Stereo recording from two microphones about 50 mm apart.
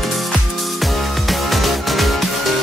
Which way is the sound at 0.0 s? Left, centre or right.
Centre.